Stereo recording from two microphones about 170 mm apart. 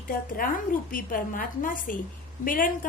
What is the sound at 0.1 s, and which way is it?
A woman's voice, 55° left (ahead or behind).